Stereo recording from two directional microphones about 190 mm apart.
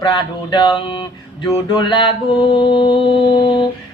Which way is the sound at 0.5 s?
25° left (ahead or behind).